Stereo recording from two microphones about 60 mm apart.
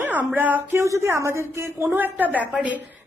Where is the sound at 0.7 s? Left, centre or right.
Right.